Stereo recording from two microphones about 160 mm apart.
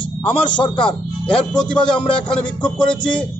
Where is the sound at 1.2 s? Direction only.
5° left (ahead or behind).